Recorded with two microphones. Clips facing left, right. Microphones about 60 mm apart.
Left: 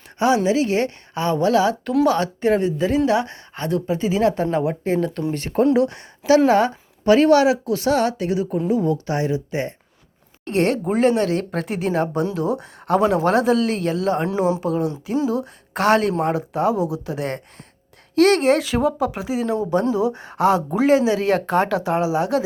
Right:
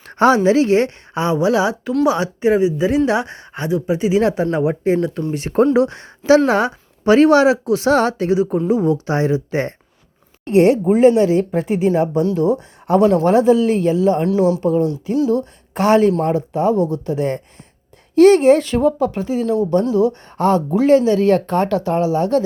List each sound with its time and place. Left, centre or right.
0.3 s speech: right; by 3.0 s centre
3.1 s speech: right
5.2 s speech: centre
5.7 s speech: right
10.5 s speech: centre
10.8 s speech: centre
13.0 s speech: centre
13.2 s speech: centre
14.3 s speech: left
14.6 s speech: centre